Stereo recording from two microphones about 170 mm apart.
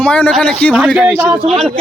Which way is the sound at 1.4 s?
35° right (ahead or behind).